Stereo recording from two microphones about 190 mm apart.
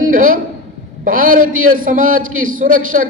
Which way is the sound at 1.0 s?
45° right (ahead or behind).